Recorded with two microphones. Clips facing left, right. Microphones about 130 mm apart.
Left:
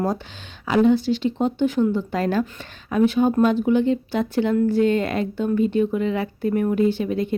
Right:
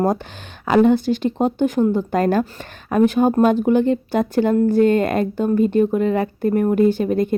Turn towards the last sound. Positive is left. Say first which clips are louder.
# right 4 dB
turn(degrees=-45)  # may be behind; listen again after turning